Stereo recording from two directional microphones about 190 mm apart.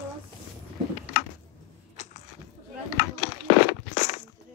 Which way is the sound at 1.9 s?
35° left (ahead or behind).